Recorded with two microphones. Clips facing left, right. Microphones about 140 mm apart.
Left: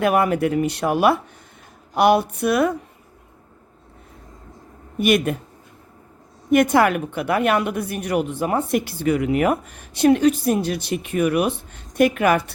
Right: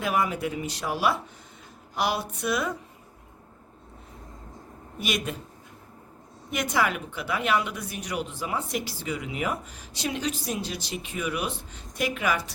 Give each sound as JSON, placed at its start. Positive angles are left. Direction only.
{"t": 0.0, "sound": "speech", "side_deg": 60}
{"t": 4.9, "sound": "speech", "side_deg": 55}
{"t": 6.5, "sound": "speech", "side_deg": 55}